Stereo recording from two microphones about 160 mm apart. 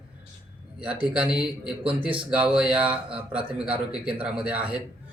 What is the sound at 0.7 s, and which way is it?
A man's voice, 5° right (ahead or behind).